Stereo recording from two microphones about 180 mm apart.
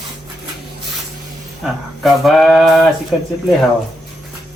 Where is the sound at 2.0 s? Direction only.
Centre (ahead or behind).